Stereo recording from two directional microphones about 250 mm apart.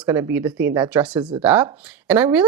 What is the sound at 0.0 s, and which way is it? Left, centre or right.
Speech, centre.